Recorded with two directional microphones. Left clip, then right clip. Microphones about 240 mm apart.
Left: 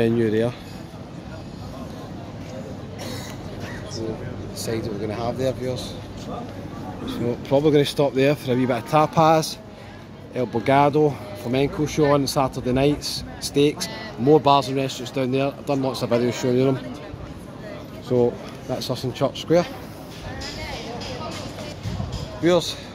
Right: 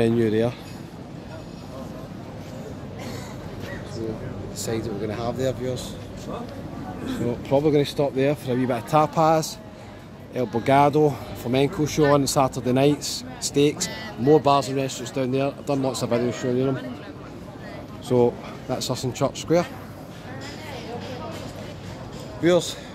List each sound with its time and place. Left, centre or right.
0.0 s speech: centre
4.6 s speech: centre
7.4 s speech: centre
18.0 s speech: centre
22.4 s speech: centre